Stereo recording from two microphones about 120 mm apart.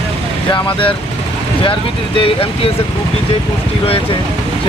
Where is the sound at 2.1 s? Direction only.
50° left (ahead or behind).